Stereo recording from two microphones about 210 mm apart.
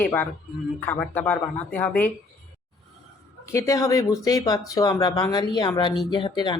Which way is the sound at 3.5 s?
15° left (ahead or behind).